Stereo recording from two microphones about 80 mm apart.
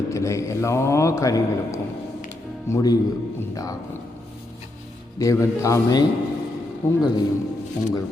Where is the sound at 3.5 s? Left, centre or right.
Left.